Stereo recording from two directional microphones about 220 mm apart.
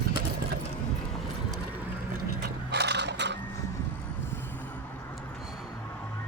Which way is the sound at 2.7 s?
50° right (ahead or behind).